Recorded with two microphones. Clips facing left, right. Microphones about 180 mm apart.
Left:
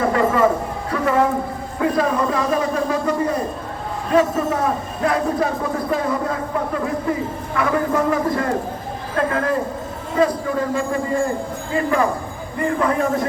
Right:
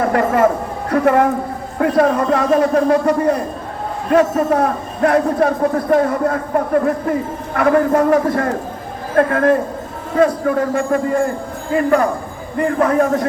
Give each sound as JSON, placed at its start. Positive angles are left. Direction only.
{"t": 0.1, "sound": "a woman's voice", "side_deg": -60}